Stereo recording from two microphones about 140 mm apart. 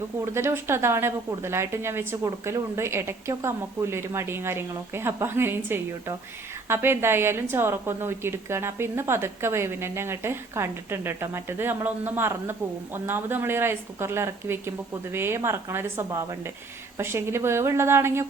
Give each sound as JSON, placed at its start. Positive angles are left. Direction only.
{"t": 0.3, "sound": "a woman's voice", "side_deg": -20}